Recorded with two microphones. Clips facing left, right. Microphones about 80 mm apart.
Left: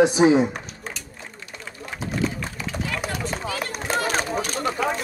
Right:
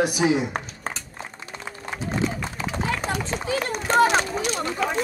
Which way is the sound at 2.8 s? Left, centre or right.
Right.